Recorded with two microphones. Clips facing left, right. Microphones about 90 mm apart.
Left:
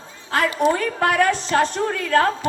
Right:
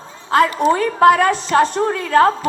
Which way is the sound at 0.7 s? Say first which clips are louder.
Right 8 dB; 25° right (ahead or behind).